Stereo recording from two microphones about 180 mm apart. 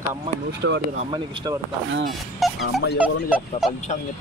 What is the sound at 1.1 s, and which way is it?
Speech, 25° right (ahead or behind).